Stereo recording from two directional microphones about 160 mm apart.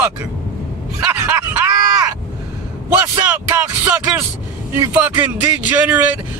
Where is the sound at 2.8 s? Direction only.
15° right (ahead or behind).